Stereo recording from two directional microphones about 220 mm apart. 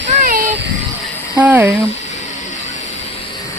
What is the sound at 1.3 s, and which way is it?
Speech, 5° right (ahead or behind).